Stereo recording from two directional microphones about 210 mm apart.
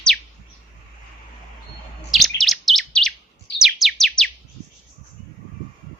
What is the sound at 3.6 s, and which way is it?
Music, centre (ahead or behind).